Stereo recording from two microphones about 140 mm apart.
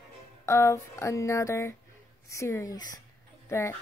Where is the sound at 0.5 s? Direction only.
20° left (ahead or behind).